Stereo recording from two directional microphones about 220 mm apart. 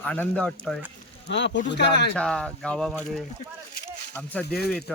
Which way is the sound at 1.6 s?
50° left (ahead or behind).